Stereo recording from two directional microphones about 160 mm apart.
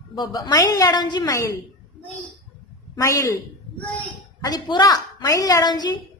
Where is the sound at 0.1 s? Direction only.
25° left (ahead or behind).